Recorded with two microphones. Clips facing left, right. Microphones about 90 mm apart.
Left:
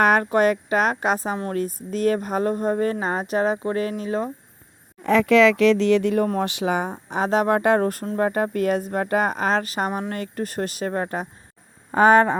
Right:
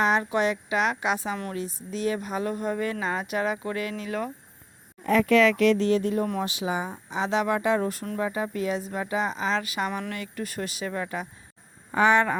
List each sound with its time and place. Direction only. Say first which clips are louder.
0.0 s speech: left 6 dB; 55° left (ahead or behind); by 4.3 s 30° left (ahead or behind)
5.0 s speech: left 4 dB; 90° left; by 6.2 s 75° left (ahead or behind)
6.4 s speech: left 5 dB; 60° left (ahead or behind)
7.1 s speech: left 5 dB; 45° left (ahead or behind)